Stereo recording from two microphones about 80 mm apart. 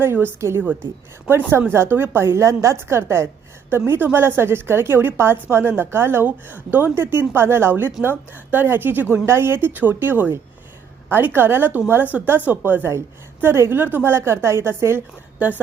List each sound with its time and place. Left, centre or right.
0.0 s a woman's voice: right
15.4 s a woman's voice: centre